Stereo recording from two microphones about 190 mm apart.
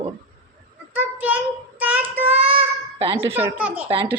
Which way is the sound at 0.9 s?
10° right (ahead or behind).